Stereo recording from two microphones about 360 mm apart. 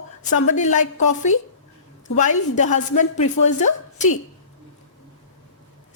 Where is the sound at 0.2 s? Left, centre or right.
Centre.